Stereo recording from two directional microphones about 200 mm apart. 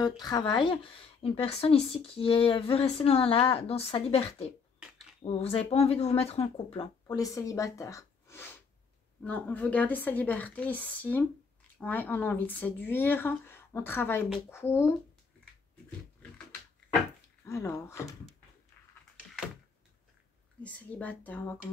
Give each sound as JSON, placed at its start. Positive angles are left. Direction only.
{"t": 0.0, "sound": "a woman's voice", "side_deg": 20}
{"t": 17.5, "sound": "a woman's voice", "side_deg": 15}
{"t": 20.6, "sound": "a woman's voice", "side_deg": 5}